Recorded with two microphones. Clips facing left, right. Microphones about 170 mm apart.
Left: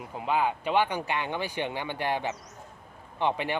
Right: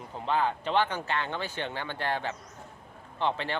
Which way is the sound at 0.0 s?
10° left (ahead or behind).